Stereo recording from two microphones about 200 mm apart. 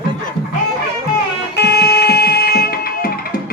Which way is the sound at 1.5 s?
55° left (ahead or behind).